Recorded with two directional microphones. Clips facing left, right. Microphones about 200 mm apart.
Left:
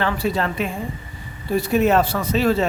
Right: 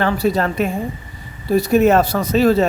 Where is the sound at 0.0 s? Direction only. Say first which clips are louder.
Right 4 dB; 40° right (ahead or behind).